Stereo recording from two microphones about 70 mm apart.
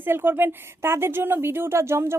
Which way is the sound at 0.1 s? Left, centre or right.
Right.